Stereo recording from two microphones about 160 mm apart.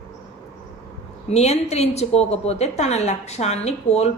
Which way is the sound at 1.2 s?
45° left (ahead or behind).